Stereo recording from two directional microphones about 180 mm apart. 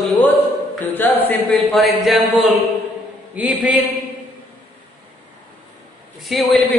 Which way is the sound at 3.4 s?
5° right (ahead or behind).